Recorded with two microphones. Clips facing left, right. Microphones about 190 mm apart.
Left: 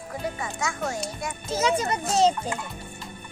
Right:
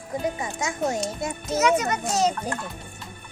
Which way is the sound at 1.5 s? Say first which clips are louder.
Right 2 dB; 30° left (ahead or behind).